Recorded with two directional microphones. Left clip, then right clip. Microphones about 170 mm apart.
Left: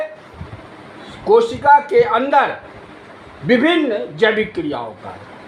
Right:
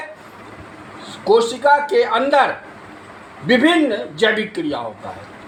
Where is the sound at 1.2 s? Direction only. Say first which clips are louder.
Left 1 dB; 20° left (ahead or behind).